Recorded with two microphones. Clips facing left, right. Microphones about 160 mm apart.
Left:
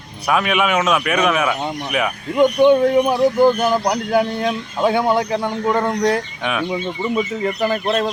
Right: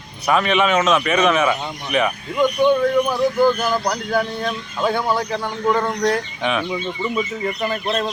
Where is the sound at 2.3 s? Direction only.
20° left (ahead or behind).